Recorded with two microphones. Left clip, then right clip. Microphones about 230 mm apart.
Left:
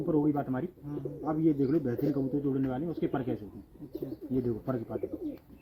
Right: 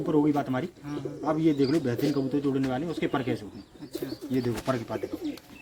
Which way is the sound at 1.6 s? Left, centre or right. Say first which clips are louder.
Right 3 dB; right.